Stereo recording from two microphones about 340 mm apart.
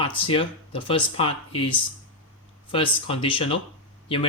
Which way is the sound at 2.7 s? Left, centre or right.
Centre.